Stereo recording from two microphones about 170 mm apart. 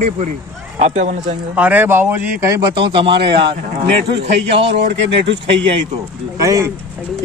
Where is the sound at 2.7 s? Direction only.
30° right (ahead or behind).